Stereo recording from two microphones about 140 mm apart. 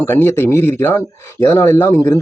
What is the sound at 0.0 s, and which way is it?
A man's voice, 15° left (ahead or behind).